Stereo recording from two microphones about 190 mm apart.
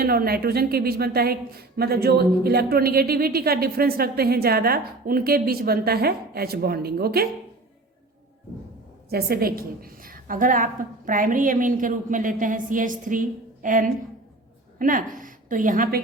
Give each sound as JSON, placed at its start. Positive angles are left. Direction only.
{"t": 0.0, "sound": "a woman's voice", "side_deg": -50}
{"t": 9.0, "sound": "a woman's voice", "side_deg": -55}